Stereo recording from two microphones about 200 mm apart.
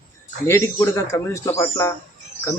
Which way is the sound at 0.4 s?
10° left (ahead or behind).